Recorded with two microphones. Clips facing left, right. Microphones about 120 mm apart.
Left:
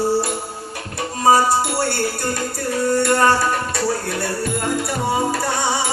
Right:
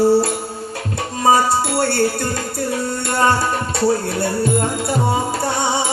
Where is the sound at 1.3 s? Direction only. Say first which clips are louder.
Even; 25° right (ahead or behind).